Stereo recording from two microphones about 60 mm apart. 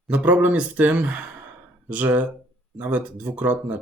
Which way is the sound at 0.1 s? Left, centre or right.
Right.